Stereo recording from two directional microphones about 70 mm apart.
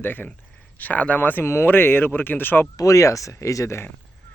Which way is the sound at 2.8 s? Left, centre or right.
Left.